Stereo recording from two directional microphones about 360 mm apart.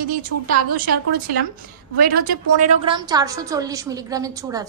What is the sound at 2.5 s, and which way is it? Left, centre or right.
A woman's voice, centre.